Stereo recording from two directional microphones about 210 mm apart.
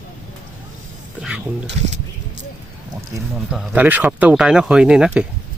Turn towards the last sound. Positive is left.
turn(degrees=-5)  # may be behind; listen again after turning